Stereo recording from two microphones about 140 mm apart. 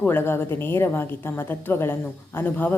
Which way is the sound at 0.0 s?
15° left (ahead or behind).